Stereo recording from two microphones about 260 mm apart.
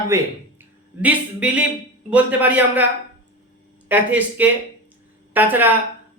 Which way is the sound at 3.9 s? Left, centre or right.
Centre.